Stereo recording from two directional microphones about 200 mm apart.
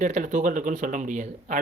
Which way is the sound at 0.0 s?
40° right (ahead or behind).